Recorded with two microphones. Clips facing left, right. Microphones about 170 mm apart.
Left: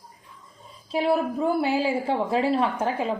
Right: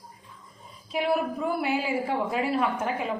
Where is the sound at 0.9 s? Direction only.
30° left (ahead or behind).